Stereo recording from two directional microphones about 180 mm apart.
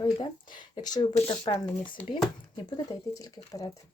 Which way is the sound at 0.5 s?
25° left (ahead or behind).